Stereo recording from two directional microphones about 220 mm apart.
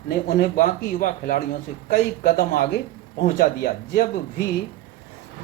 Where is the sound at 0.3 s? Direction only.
40° left (ahead or behind).